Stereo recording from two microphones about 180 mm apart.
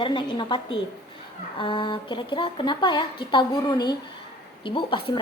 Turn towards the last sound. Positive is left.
turn(degrees=30)  # may be behind; listen again after turning